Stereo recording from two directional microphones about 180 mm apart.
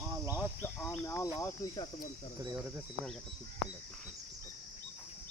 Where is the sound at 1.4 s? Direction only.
20° left (ahead or behind).